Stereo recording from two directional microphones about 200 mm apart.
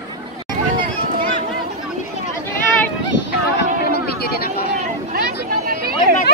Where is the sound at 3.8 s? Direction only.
55° left (ahead or behind).